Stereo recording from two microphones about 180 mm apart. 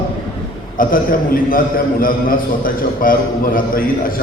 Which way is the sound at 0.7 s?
50° left (ahead or behind).